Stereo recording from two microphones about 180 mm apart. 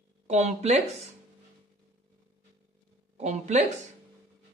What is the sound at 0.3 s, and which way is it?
Speech, 40° right (ahead or behind).